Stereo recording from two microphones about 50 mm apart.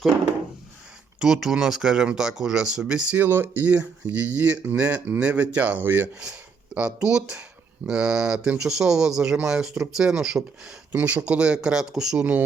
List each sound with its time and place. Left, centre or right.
1.2 s speech: centre
3.2 s speech: right
5.8 s speech: right
6.1 s speech: right
10.9 s speech: right
12.1 s speech: right